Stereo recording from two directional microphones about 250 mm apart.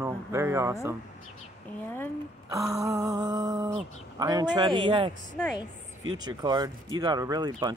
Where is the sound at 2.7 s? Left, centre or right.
Centre.